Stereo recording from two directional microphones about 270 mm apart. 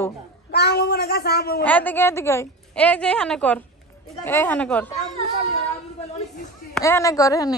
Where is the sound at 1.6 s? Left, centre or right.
Centre.